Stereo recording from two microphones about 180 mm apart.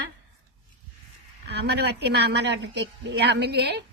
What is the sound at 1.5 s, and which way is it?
A woman's voice, 65° right (ahead or behind).